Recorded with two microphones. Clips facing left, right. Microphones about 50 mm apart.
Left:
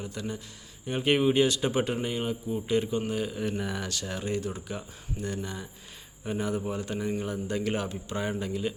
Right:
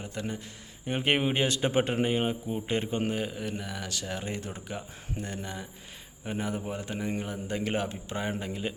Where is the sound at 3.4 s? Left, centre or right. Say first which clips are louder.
Left 4 dB; centre.